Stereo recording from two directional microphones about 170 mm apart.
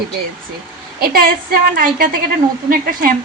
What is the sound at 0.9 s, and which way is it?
A woman's voice, 60° right (ahead or behind).